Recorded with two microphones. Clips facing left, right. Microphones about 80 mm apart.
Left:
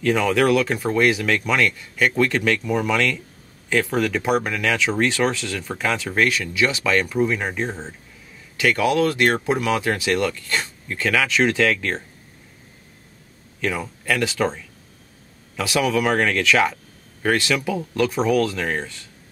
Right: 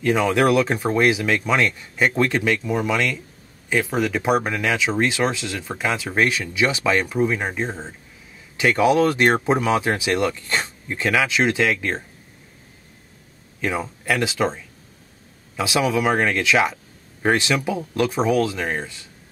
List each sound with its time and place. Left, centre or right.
0.0 s speech: centre
8.5 s speech: right
13.6 s speech: centre
15.5 s speech: centre